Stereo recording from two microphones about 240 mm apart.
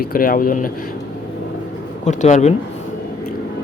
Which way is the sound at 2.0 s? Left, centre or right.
Left.